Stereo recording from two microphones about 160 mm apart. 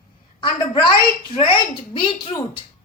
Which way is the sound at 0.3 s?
30° left (ahead or behind).